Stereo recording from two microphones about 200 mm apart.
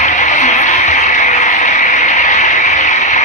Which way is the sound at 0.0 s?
40° left (ahead or behind).